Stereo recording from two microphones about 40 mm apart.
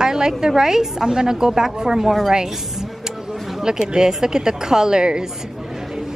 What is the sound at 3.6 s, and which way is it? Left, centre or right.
A woman's voice, centre.